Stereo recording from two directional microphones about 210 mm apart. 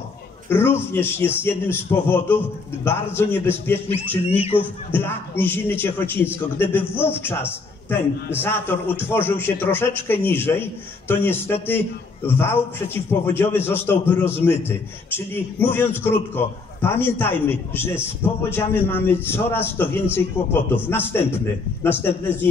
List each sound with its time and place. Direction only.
0.5 s a man's voice: 10° left (ahead or behind)
4.3 s speech: 25° left (ahead or behind)
4.6 s a man's voice: 10° left (ahead or behind)